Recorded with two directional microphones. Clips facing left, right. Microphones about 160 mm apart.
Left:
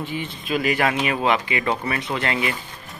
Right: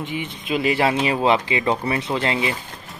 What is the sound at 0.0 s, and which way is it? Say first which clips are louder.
Speech: right 1 dB; 20° right (ahead or behind).